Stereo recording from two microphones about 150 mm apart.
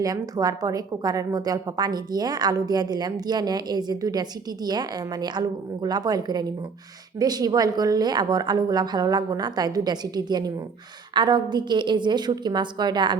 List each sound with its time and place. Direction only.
0.0 s a woman's voice: 25° right (ahead or behind)